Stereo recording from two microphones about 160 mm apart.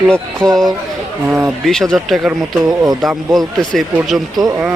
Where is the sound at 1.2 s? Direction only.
10° right (ahead or behind).